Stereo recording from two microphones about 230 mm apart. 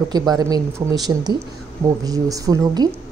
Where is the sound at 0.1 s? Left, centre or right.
Centre.